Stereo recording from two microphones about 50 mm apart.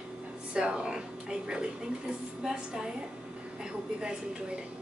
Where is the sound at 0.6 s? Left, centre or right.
Centre.